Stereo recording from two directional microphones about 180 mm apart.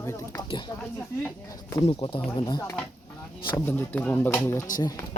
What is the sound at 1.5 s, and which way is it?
Speech, 20° left (ahead or behind).